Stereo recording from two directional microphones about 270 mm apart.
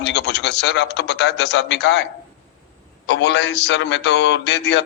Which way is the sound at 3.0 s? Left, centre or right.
Left.